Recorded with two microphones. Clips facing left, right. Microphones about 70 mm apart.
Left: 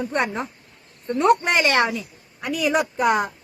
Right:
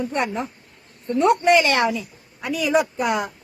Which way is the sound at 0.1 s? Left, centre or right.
Left.